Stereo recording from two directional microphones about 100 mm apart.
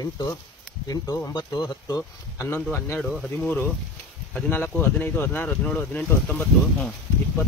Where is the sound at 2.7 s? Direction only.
20° left (ahead or behind).